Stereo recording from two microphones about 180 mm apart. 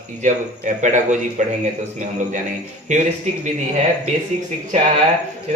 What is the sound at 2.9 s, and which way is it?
Speech, 40° right (ahead or behind).